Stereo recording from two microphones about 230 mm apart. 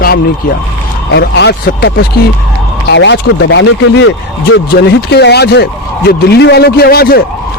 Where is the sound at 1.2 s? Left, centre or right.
Left.